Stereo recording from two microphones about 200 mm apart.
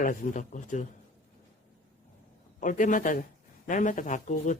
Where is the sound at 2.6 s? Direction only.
40° left (ahead or behind).